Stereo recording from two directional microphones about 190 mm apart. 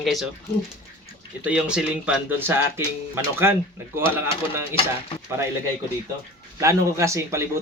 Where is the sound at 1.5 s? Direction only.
5° right (ahead or behind).